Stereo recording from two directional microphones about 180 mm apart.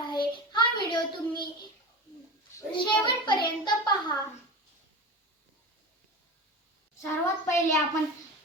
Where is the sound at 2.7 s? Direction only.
25° left (ahead or behind).